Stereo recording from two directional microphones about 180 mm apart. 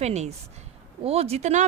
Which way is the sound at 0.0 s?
35° right (ahead or behind).